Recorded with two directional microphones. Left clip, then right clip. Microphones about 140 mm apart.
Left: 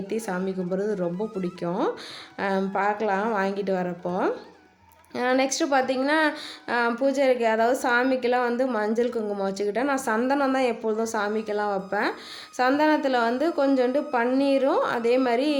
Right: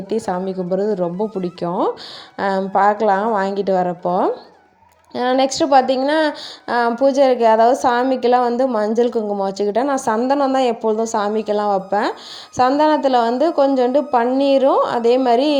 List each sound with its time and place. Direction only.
0.1 s a woman's voice: 35° right (ahead or behind)